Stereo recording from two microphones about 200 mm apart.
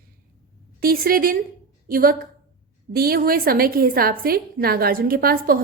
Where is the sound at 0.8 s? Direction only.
45° right (ahead or behind).